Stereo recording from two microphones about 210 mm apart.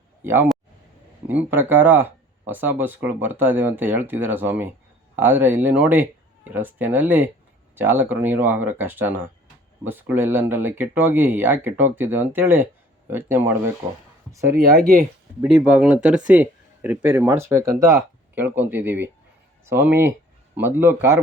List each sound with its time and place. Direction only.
0.2 s speech: 10° right (ahead or behind)
14.5 s speech: 45° right (ahead or behind)
15.4 s speech: 5° right (ahead or behind)